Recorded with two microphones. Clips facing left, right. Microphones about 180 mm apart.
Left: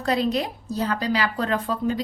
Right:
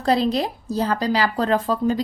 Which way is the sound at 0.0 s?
35° right (ahead or behind).